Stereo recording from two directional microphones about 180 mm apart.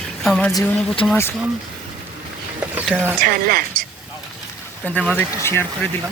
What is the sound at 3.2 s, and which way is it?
Speech, 50° right (ahead or behind).